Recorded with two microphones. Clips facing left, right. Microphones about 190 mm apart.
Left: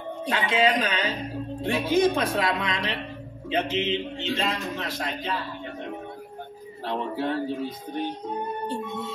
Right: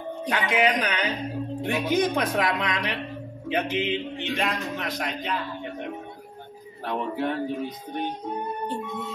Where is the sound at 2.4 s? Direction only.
25° left (ahead or behind).